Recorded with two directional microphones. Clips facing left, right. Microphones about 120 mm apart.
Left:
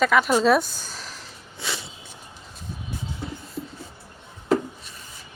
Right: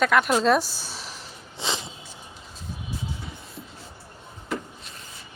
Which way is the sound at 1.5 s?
20° right (ahead or behind).